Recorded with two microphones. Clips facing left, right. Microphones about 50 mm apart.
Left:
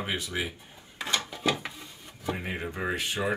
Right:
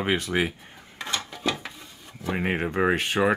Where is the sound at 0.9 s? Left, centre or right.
Centre.